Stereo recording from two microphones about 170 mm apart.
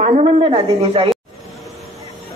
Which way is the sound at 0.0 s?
35° right (ahead or behind).